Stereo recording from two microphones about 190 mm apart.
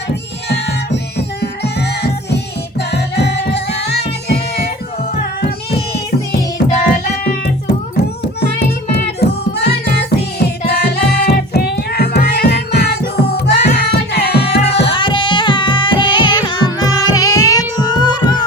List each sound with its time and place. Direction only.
0.1 s music: 60° left (ahead or behind)
6.7 s music: 50° left (ahead or behind)
9.6 s music: 60° left (ahead or behind)
14.8 s carnatic music: 25° left (ahead or behind)